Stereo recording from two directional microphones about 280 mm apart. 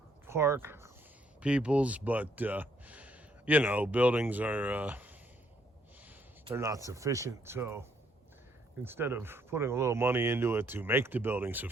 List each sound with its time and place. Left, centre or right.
0.3 s speech: centre
6.5 s speech: centre